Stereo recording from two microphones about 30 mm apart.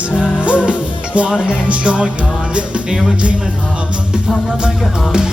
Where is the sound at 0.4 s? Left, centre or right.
Right.